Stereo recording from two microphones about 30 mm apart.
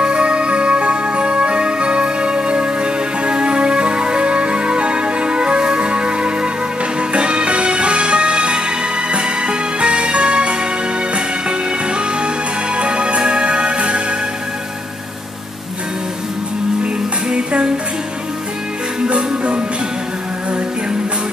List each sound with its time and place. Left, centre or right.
0.0 s music: right
16.8 s music: right
18.9 s music: right